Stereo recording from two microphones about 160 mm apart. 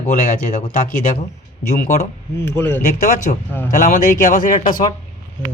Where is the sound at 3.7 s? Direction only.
55° left (ahead or behind).